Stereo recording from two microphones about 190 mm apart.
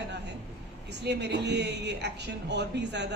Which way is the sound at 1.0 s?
60° right (ahead or behind).